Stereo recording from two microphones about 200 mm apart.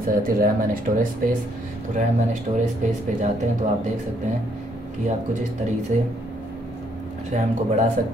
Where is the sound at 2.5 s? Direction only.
25° right (ahead or behind).